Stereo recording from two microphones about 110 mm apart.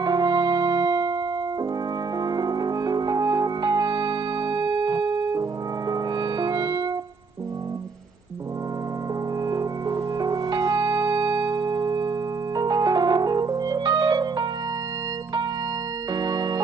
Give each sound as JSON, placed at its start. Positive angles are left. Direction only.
{"t": 0.0, "sound": "music", "side_deg": -40}
{"t": 2.1, "sound": "music", "side_deg": -40}
{"t": 9.5, "sound": "music", "side_deg": -35}
{"t": 16.1, "sound": "music", "side_deg": -40}